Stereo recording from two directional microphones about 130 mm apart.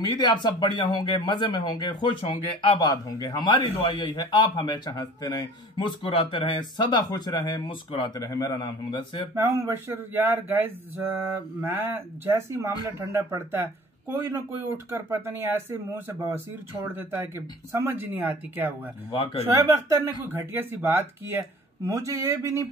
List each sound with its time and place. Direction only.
0.1 s speech: 35° left (ahead or behind)
9.3 s speech: 20° right (ahead or behind)